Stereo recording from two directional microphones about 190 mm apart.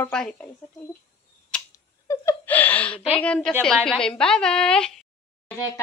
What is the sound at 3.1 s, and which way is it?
A woman's voice, 5° left (ahead or behind).